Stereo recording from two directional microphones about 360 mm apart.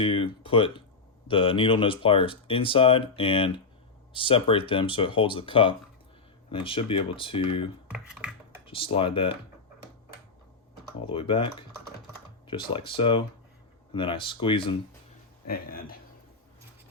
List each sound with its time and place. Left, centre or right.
0.0 s speech: centre
7.9 s computer keyboard: centre
8.6 s speech: centre
11.0 s speech: centre
12.5 s speech: centre